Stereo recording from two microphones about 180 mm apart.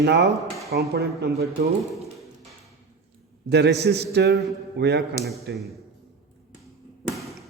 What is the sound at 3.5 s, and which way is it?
A man's voice, 70° right (ahead or behind).